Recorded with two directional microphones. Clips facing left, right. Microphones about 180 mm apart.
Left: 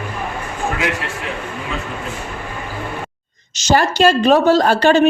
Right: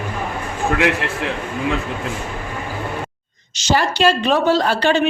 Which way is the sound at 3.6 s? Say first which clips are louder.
Left 3 dB; 45° left (ahead or behind).